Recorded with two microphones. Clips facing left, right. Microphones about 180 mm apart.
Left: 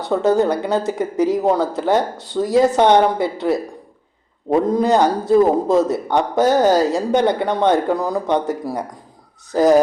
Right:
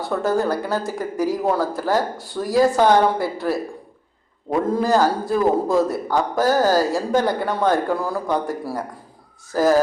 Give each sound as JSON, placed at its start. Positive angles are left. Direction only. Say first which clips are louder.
{"t": 0.0, "sound": "a man's voice", "louder": "left 5 dB", "side_deg": 20}